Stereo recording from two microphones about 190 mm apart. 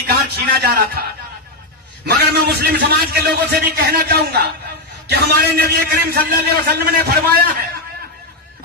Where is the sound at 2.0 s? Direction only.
55° right (ahead or behind).